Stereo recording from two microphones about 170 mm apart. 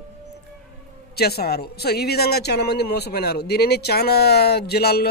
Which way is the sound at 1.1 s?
65° left (ahead or behind).